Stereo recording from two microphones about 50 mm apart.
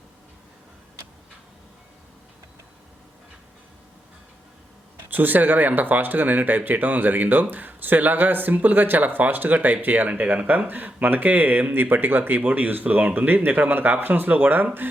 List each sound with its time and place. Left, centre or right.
5.1 s speech: right
12.4 s speech: right